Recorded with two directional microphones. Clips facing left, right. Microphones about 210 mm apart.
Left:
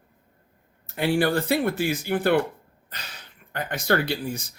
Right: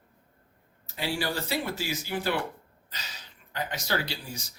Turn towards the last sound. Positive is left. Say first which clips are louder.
# left 8 dB
turn(degrees=55)  # may be behind; listen again after turning